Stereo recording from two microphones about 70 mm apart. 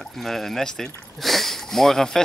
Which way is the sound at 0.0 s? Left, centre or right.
Centre.